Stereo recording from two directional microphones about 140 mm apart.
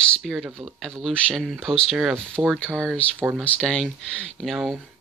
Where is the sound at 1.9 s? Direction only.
10° right (ahead or behind).